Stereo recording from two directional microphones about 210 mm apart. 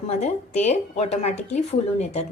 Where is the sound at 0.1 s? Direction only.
30° left (ahead or behind).